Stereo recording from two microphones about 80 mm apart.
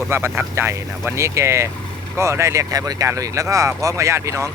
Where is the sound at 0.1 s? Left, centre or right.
Right.